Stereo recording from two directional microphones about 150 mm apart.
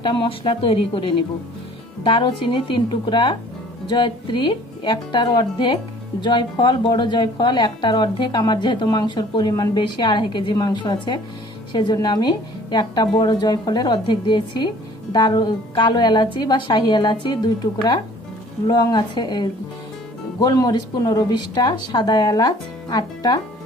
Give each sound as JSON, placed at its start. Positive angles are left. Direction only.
{"t": 0.0, "sound": "a woman's voice", "side_deg": 35}
{"t": 18.7, "sound": "a woman's voice", "side_deg": 30}